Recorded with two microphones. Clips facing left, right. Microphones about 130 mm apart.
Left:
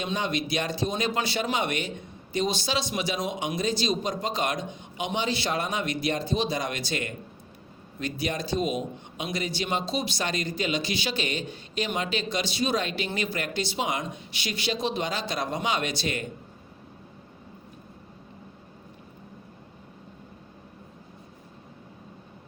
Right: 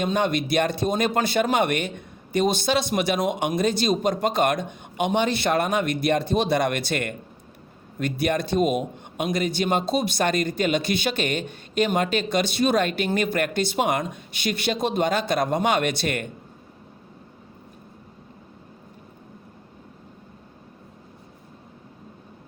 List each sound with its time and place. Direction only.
0.0 s a man's voice: 50° right (ahead or behind)